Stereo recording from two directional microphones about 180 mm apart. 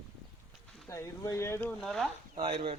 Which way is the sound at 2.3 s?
30° right (ahead or behind).